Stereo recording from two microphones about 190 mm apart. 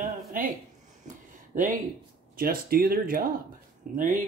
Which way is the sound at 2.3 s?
50° right (ahead or behind).